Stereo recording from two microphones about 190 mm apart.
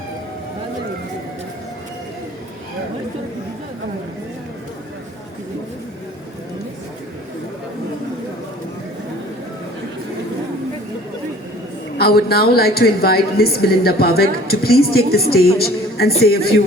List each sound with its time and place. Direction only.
11.9 s a woman's voice: 55° left (ahead or behind)